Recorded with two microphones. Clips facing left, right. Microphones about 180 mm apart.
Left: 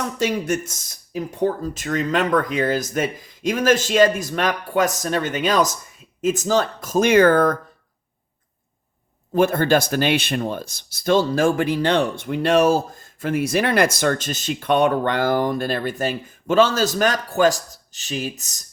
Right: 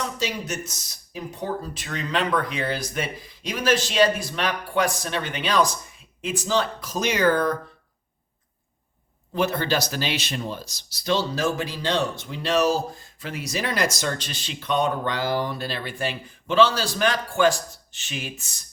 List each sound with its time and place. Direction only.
0.0 s speech: 50° left (ahead or behind)
9.3 s speech: 50° left (ahead or behind)